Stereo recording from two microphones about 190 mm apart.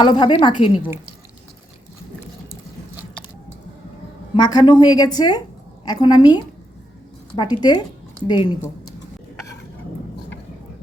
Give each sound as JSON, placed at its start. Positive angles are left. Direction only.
{"t": 0.0, "sound": "a woman's voice", "side_deg": 25}
{"t": 4.4, "sound": "a woman's voice", "side_deg": 20}